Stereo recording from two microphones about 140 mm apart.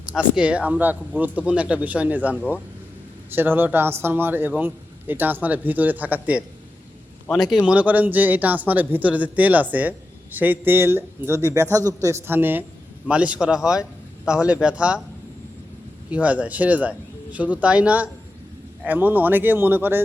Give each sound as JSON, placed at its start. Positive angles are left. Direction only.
{"t": 0.3, "sound": "speech", "side_deg": -10}
{"t": 7.5, "sound": "speech", "side_deg": -10}
{"t": 16.0, "sound": "speech", "side_deg": -10}